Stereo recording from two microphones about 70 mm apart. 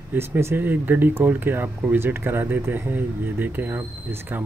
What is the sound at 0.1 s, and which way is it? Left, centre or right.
Speech, right.